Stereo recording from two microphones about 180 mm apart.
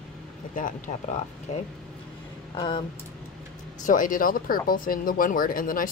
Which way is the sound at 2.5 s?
25° left (ahead or behind).